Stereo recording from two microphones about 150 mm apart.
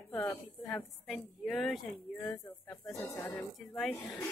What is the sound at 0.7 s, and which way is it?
A woman's voice, 5° left (ahead or behind).